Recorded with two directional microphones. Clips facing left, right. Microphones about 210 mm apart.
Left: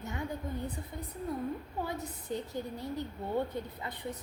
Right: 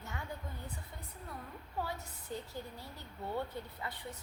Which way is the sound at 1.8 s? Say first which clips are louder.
Left 4 dB; 20° left (ahead or behind).